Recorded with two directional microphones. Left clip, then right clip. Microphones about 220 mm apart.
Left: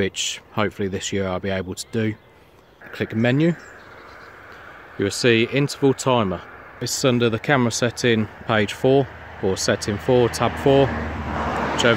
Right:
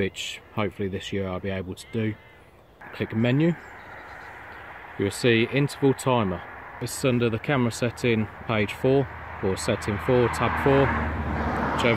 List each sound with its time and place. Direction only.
0.0 s speech: 10° left (ahead or behind)
4.9 s speech: 10° left (ahead or behind)
11.3 s vehicle: 45° left (ahead or behind)